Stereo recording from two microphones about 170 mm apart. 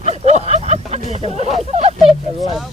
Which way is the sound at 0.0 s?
40° right (ahead or behind).